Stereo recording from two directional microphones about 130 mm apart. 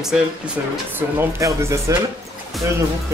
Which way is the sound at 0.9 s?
20° right (ahead or behind).